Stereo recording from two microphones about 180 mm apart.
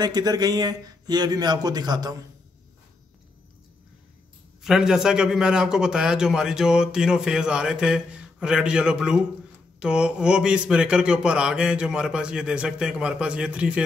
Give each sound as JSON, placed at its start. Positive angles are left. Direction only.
{"t": 0.0, "sound": "speech", "side_deg": -20}
{"t": 4.6, "sound": "a man's voice", "side_deg": -5}